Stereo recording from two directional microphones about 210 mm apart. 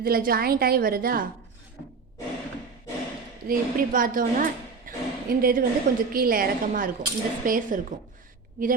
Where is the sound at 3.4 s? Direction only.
40° right (ahead or behind).